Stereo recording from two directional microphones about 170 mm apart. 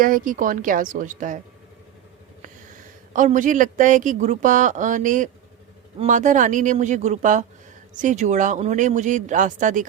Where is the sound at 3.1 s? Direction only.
50° right (ahead or behind).